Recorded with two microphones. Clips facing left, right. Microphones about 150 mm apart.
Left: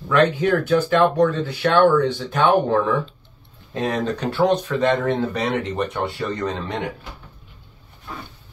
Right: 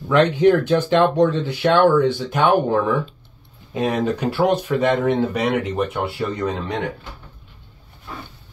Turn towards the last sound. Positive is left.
turn(degrees=-5)  # may be behind; listen again after turning